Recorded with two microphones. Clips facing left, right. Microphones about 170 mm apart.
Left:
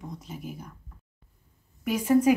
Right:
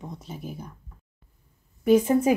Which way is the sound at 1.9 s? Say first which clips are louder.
Right 3 dB; 25° right (ahead or behind).